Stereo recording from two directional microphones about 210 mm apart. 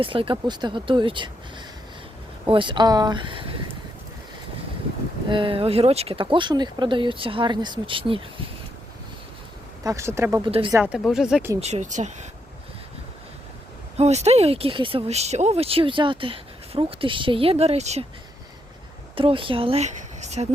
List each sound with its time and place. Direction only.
0.0 s speech: 25° right (ahead or behind)
2.5 s speech: 25° right (ahead or behind)
5.3 s speech: 25° right (ahead or behind)
9.8 s speech: 15° right (ahead or behind)
11.6 s speech: 35° right (ahead or behind)
13.9 s speech: 30° right (ahead or behind)
19.1 s speech: 25° right (ahead or behind)